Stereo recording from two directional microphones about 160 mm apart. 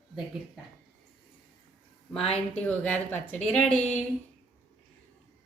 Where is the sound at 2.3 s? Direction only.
10° left (ahead or behind).